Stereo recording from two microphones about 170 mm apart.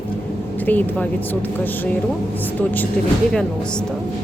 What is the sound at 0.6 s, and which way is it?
Speech, 10° left (ahead or behind).